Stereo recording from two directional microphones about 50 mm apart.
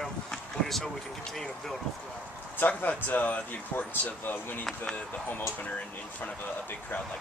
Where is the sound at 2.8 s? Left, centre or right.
Left.